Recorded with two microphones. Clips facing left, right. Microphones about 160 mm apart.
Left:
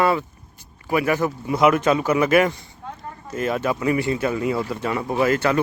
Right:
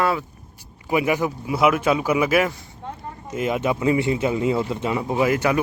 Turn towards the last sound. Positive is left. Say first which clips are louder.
# even
turn(degrees=-15)  # may be behind; listen again after turning